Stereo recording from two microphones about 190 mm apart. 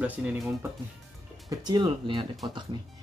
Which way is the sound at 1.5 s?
20° right (ahead or behind).